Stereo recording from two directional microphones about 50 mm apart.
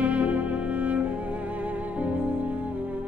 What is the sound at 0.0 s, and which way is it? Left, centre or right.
Music, right.